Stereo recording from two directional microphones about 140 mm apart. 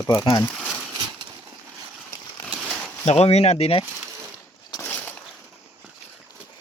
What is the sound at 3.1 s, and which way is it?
Speech, 50° left (ahead or behind).